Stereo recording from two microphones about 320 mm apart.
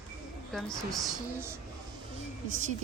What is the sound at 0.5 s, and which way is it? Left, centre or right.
Speech, centre.